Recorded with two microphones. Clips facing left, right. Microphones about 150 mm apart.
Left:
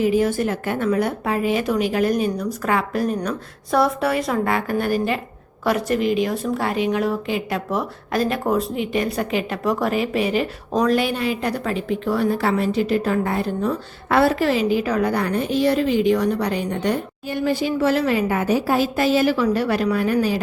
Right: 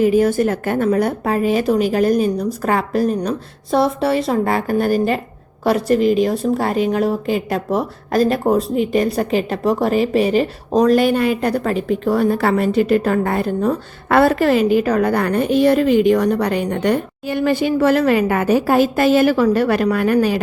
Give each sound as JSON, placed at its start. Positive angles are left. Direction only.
{"t": 0.0, "sound": "a woman's voice", "side_deg": -45}
{"t": 3.2, "sound": "a woman's voice", "side_deg": -25}